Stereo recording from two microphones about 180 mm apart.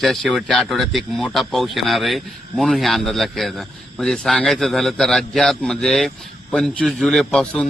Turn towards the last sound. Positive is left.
turn(degrees=5)  # may be behind; listen again after turning